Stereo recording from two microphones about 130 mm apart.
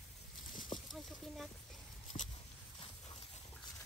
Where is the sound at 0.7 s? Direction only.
Centre (ahead or behind).